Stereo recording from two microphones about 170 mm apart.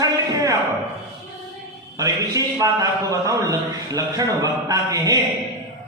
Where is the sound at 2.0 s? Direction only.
20° right (ahead or behind).